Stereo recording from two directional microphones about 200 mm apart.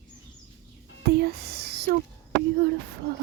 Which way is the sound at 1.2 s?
50° right (ahead or behind).